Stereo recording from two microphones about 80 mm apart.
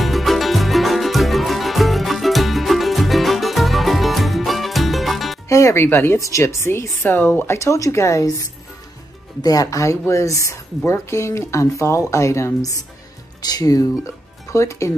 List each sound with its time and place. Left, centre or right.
0.0 s music: centre
5.5 s speech: left
5.9 s speech: left
6.1 s speech: left
9.4 s speech: left
13.4 s speech: left